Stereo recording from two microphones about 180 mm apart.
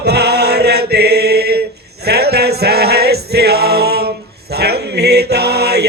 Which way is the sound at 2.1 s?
65° right (ahead or behind).